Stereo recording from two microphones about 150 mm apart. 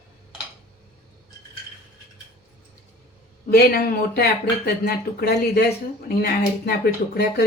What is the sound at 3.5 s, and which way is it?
Speech, 90° left.